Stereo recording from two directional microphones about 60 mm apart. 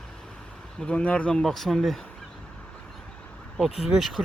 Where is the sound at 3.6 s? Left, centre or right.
Centre.